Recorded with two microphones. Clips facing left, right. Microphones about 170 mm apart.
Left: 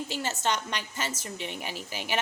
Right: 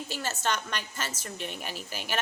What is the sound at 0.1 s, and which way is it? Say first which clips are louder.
A woman's voice: even; 20° left (ahead or behind).